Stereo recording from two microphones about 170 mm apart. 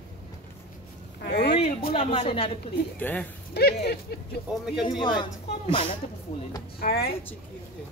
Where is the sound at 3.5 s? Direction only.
70° left (ahead or behind).